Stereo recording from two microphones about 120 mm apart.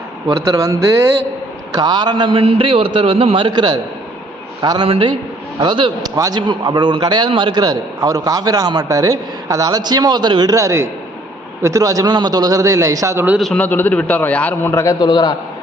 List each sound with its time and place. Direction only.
0.3 s a man's voice: 30° right (ahead or behind)
1.7 s a man's voice: 35° right (ahead or behind); by 3.4 s 50° right (ahead or behind)
3.4 s a man's voice: 35° right (ahead or behind)
4.9 s a man's voice: 50° right (ahead or behind); by 13.2 s 25° right (ahead or behind)
13.4 s a man's voice: 10° left (ahead or behind); by 15.4 s 35° left (ahead or behind)